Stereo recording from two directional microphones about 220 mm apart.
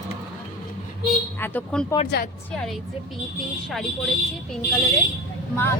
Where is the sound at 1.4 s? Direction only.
10° left (ahead or behind).